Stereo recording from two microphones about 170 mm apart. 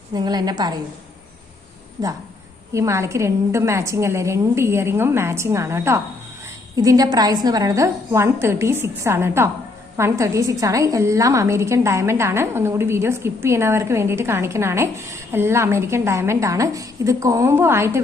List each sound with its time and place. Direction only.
0.1 s a woman's voice: 25° right (ahead or behind)
2.7 s a woman's voice: 15° right (ahead or behind)